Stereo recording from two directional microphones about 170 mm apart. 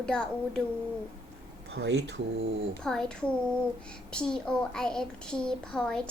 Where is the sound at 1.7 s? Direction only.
90° right.